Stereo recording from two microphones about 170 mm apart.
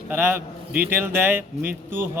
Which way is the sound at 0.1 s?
10° right (ahead or behind).